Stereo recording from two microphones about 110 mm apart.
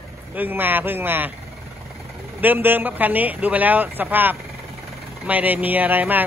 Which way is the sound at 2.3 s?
20° right (ahead or behind).